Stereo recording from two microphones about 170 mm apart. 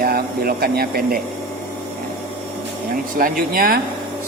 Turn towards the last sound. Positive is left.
turn(degrees=-60)  # may be behind; listen again after turning